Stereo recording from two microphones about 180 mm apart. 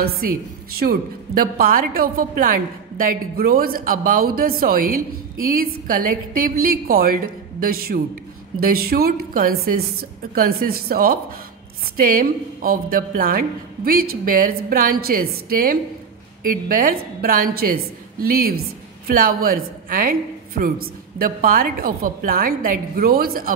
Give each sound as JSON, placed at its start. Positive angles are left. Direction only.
{"t": 0.0, "sound": "a woman's voice", "side_deg": -60}